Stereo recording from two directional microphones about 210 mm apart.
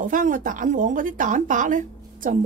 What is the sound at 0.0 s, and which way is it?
A woman's voice, 40° right (ahead or behind).